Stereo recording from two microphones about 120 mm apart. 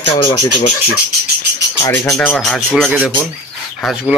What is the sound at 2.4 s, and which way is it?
Speech, 5° left (ahead or behind).